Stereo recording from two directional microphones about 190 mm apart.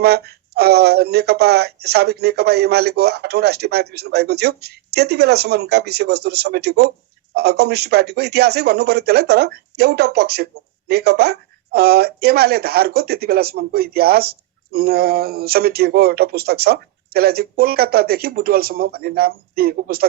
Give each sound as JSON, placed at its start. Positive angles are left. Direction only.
{"t": 0.0, "sound": "speech", "side_deg": -55}